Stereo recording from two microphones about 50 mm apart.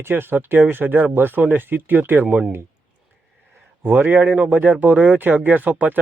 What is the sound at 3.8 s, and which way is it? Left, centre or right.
Speech, right.